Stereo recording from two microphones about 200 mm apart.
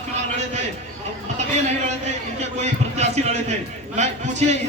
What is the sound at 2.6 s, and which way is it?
A man's voice, 35° right (ahead or behind).